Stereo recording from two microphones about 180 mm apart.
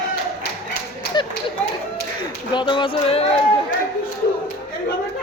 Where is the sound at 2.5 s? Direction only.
25° left (ahead or behind).